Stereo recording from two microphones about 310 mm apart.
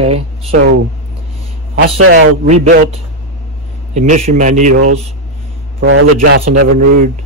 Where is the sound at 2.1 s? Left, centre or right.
Right.